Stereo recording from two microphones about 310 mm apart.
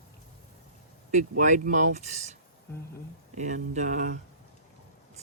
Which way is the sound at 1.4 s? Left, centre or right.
Right.